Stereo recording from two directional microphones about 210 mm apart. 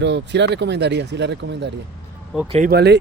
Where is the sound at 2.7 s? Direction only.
50° right (ahead or behind).